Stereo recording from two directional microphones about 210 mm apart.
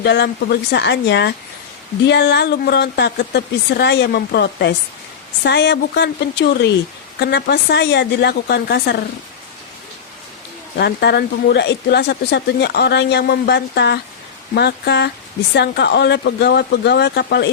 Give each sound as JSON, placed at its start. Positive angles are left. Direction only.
{"t": 0.0, "sound": "speech", "side_deg": 55}
{"t": 10.8, "sound": "speech", "side_deg": 50}